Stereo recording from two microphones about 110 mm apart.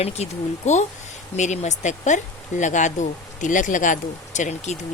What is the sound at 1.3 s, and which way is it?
Speech, 90° left.